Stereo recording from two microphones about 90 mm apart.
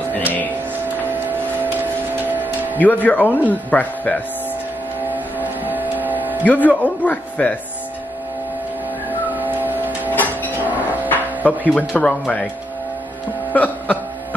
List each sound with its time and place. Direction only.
2.2 s music: 20° right (ahead or behind)
2.8 s speech: 20° left (ahead or behind)
5.1 s vehicle: 20° right (ahead or behind)
6.4 s speech: 15° left (ahead or behind)
9.3 s music: 20° right (ahead or behind)
10.1 s music: 20° left (ahead or behind)
10.6 s a sound: 20° right (ahead or behind)
11.1 s music: 20° left (ahead or behind)
11.9 s speech: 15° left (ahead or behind)
13.5 s a sound: 15° left (ahead or behind)